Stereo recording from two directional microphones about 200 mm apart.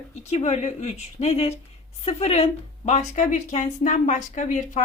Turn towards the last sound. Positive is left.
turn(degrees=40)  # may be behind; listen again after turning